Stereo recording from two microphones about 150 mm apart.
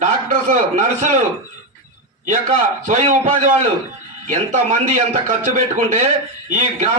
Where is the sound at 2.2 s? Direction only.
55° right (ahead or behind).